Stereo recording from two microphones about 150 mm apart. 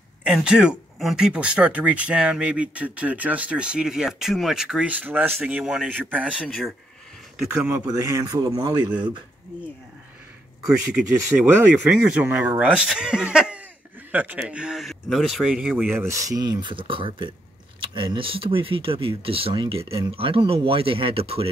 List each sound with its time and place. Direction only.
0.2 s speech: 5° right (ahead or behind)
7.8 s speech: 20° right (ahead or behind)
10.9 s speech: 5° right (ahead or behind); by 21.5 s 40° right (ahead or behind)